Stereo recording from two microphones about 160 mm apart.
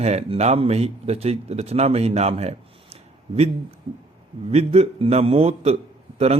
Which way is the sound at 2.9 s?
40° right (ahead or behind).